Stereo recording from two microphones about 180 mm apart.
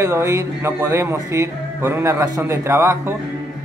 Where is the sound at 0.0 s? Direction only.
15° right (ahead or behind).